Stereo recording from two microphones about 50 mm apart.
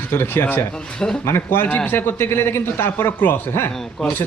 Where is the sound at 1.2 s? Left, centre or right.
Left.